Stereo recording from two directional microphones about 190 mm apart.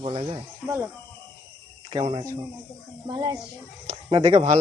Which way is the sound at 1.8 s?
30° right (ahead or behind).